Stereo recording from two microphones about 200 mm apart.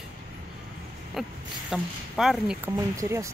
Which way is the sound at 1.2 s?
Centre (ahead or behind).